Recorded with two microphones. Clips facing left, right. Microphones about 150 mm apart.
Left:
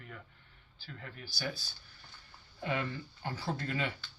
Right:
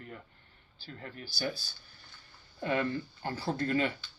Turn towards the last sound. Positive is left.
turn(degrees=-40)  # may be behind; listen again after turning